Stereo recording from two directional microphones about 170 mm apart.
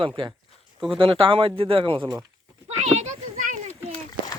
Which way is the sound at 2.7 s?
40° right (ahead or behind).